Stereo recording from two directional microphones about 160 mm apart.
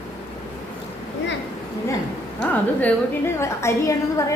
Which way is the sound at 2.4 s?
10° left (ahead or behind).